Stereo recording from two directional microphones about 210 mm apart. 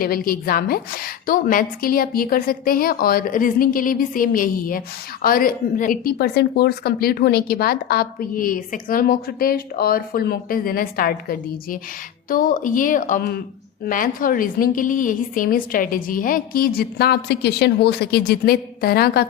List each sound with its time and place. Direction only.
0.0 s speech: 45° left (ahead or behind)